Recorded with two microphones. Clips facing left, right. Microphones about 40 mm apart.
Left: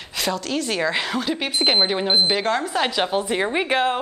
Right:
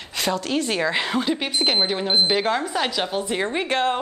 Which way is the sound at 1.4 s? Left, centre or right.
Centre.